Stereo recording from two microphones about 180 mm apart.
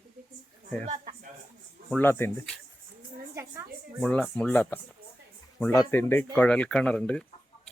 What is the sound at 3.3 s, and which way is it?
Speech, 15° right (ahead or behind).